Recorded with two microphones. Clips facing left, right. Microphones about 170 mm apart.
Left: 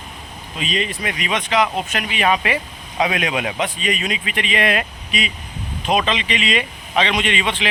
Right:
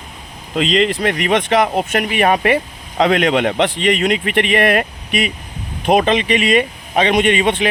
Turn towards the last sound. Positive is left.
turn(degrees=-45)  # may be behind; listen again after turning